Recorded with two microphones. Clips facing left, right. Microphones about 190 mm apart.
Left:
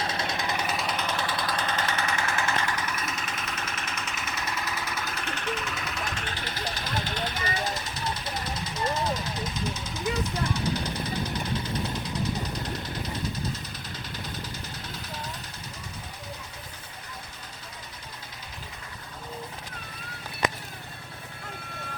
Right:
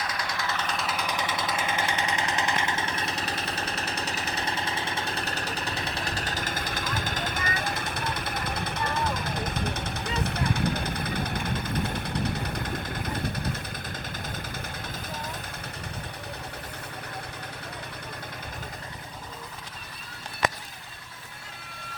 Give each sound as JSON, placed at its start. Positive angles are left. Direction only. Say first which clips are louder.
{"t": 0.0, "sound": "vehicle", "louder": "left 2 dB", "side_deg": 25}
{"t": 0.9, "sound": "vehicle", "louder": "left 1 dB", "side_deg": -10}
{"t": 1.5, "sound": "engine", "louder": "even", "side_deg": -10}
{"t": 10.2, "sound": "vehicle", "louder": "right 1 dB", "side_deg": -60}